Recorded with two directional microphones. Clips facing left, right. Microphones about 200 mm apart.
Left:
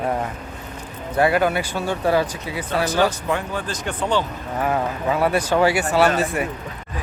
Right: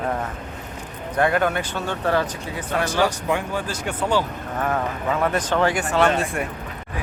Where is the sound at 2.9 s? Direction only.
15° right (ahead or behind).